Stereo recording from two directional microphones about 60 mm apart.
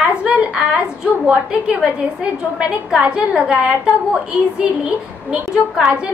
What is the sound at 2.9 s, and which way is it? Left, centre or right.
A woman's voice, centre.